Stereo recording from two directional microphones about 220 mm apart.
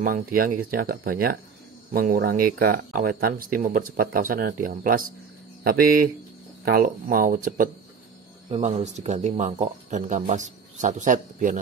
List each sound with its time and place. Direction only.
0.0 s speech: 40° right (ahead or behind)
8.5 s speech: 25° right (ahead or behind)